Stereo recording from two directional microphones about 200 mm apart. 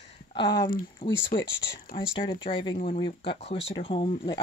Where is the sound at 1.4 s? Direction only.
60° left (ahead or behind).